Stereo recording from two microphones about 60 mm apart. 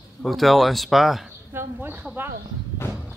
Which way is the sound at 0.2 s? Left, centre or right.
Centre.